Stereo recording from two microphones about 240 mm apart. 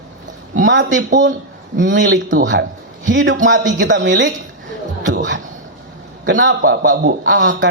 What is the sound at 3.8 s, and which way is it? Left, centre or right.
Speech, right.